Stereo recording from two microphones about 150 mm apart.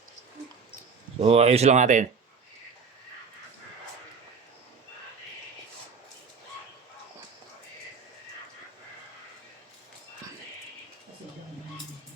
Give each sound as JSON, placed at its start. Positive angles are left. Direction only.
{"t": 1.2, "sound": "speech", "side_deg": -45}